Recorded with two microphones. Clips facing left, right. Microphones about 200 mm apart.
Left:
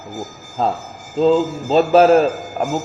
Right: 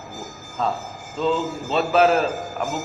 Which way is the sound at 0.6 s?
35° left (ahead or behind).